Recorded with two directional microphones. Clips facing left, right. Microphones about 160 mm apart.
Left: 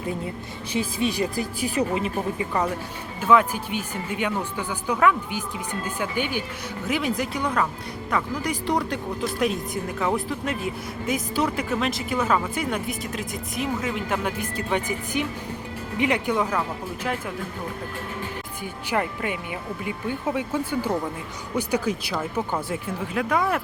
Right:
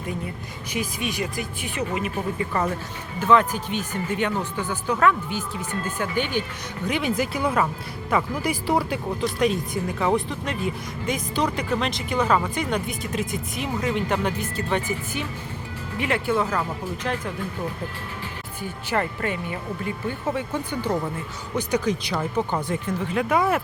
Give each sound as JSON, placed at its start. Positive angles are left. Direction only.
{"t": 0.7, "sound": "speech", "side_deg": 30}
{"t": 2.4, "sound": "speech", "side_deg": 10}
{"t": 6.8, "sound": "speech", "side_deg": 0}
{"t": 18.6, "sound": "speech", "side_deg": 10}